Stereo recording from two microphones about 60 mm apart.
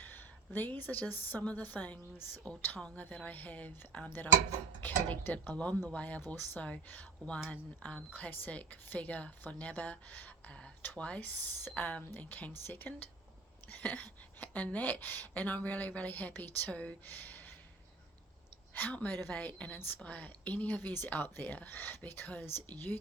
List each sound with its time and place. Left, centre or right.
0.0 s a woman's voice: left
2.7 s a woman's voice: left
17.1 s a sound: left
18.7 s a woman's voice: left